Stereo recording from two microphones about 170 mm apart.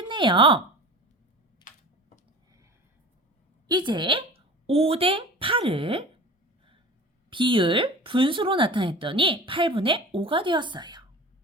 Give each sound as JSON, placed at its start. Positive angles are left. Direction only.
{"t": 0.0, "sound": "speech", "side_deg": -30}
{"t": 3.7, "sound": "speech", "side_deg": -25}
{"t": 7.3, "sound": "speech", "side_deg": -30}